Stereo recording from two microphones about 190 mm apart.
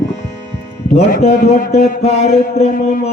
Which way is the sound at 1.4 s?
40° left (ahead or behind).